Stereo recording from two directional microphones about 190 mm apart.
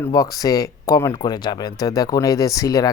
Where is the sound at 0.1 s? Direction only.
20° left (ahead or behind).